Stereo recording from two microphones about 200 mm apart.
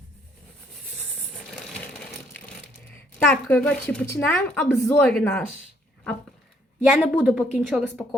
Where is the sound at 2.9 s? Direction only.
10° left (ahead or behind).